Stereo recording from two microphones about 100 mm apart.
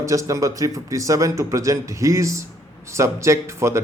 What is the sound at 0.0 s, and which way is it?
Speech, 35° right (ahead or behind).